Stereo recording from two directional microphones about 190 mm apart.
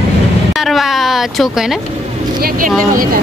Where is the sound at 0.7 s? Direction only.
Centre (ahead or behind).